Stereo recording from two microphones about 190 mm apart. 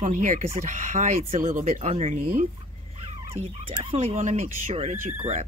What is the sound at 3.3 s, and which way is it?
Speech, 30° right (ahead or behind).